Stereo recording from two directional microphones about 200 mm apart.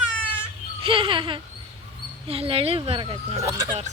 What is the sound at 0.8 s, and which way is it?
Speech, 25° right (ahead or behind).